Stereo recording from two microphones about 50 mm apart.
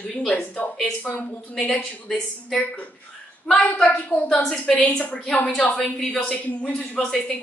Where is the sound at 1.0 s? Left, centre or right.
Left.